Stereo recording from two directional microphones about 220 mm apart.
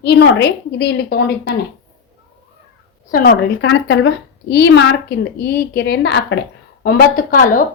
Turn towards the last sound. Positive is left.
turn(degrees=35)  # may be behind; listen again after turning